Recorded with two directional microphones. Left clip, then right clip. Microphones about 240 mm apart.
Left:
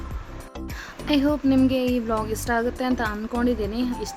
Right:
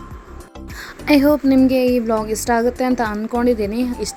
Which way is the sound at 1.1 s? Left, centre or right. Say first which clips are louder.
Right 8 dB; right.